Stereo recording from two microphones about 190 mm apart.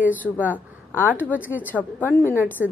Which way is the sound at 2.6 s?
5° right (ahead or behind).